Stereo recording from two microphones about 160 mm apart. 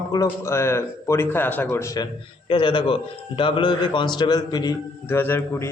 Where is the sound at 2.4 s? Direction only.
30° left (ahead or behind).